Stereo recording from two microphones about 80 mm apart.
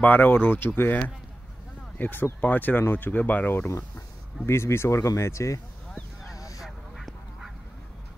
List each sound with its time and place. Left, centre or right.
0.0 s speech: left
2.0 s speech: left
6.3 s a sound: left
6.6 s goose: centre